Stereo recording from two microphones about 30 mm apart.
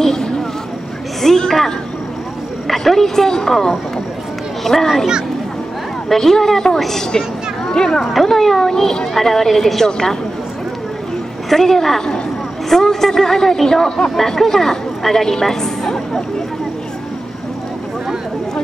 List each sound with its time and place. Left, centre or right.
0.0 s a sound: centre
2.7 s speech: centre
4.7 s speech: centre
6.0 s speech: centre
8.0 s speech: centre
9.8 s a woman's voice: left
11.4 s speech: centre